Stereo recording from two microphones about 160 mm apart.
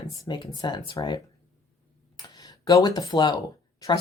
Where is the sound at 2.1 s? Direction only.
25° left (ahead or behind).